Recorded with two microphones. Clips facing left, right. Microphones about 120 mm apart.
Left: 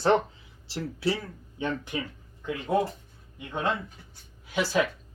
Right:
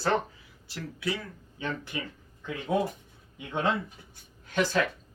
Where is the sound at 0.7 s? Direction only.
30° left (ahead or behind).